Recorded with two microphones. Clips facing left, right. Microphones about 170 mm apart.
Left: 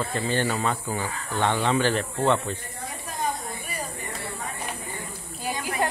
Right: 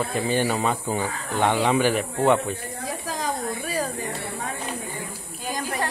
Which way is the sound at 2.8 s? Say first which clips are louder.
Right 1 dB; 90° right.